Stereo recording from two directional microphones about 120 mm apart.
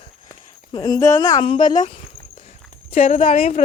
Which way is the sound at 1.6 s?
90° left.